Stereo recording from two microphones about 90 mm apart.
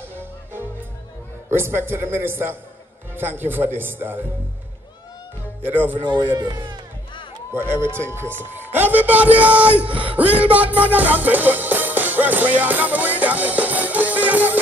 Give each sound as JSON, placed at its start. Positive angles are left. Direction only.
{"t": 0.2, "sound": "music", "side_deg": -25}
{"t": 1.5, "sound": "a man's voice", "side_deg": -25}
{"t": 5.7, "sound": "a man's voice", "side_deg": -20}
{"t": 5.9, "sound": "speech", "side_deg": -60}
{"t": 7.5, "sound": "a man's voice", "side_deg": -25}
{"t": 10.3, "sound": "music", "side_deg": -15}